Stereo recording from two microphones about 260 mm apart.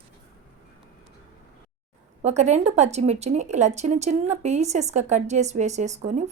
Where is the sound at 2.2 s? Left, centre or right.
Right.